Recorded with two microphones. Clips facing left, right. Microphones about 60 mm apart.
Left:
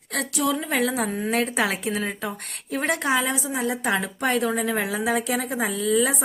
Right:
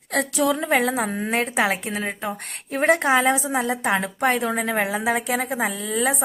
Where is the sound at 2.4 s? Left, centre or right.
Right.